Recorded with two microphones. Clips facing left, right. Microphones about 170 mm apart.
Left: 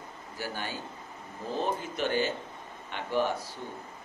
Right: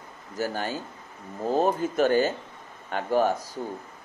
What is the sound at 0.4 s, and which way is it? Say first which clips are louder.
Speech: right 7 dB; 45° right (ahead or behind).